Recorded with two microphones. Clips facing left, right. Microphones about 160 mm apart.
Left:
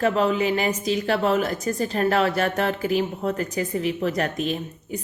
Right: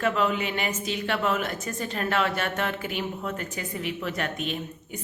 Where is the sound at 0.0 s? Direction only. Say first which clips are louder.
Left 5 dB; 35° left (ahead or behind).